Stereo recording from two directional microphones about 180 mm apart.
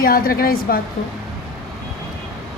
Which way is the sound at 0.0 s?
55° left (ahead or behind).